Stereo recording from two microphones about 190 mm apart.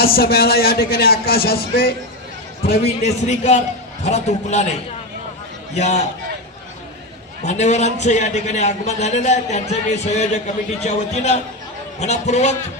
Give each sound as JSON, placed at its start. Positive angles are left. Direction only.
{"t": 0.0, "sound": "a man's voice", "side_deg": 55}
{"t": 3.0, "sound": "a man's voice", "side_deg": 35}
{"t": 5.7, "sound": "a man's voice", "side_deg": 35}
{"t": 7.4, "sound": "a man's voice", "side_deg": 35}